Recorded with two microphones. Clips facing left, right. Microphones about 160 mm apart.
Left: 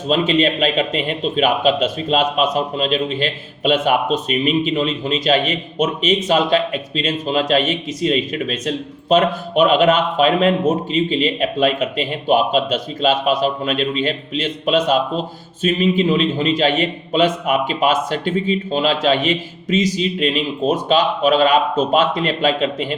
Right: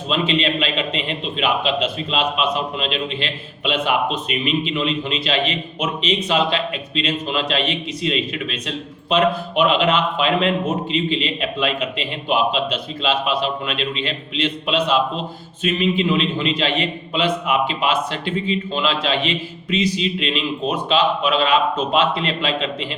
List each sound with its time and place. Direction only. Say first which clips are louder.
0.1 s a man's voice: left 4 dB; 45° left (ahead or behind)